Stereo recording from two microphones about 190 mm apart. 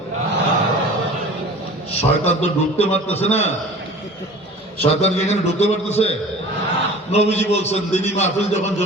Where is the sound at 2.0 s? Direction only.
35° left (ahead or behind).